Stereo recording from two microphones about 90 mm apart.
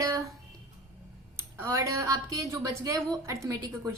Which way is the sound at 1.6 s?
35° right (ahead or behind).